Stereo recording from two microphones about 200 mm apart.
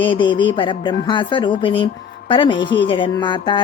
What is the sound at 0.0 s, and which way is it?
Speech, 25° left (ahead or behind).